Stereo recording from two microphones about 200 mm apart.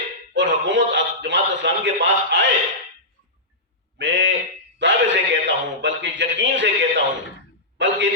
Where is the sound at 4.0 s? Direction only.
65° right (ahead or behind).